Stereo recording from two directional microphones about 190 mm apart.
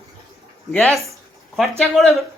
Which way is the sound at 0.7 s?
Centre (ahead or behind).